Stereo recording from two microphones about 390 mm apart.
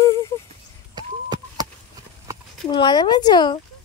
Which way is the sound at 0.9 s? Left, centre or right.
Centre.